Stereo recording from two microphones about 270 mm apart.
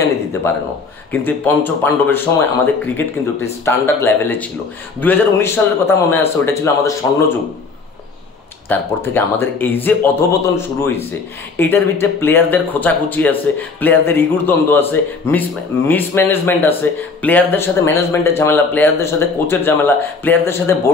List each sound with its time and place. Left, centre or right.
1.2 s speech: centre
8.6 s speech: centre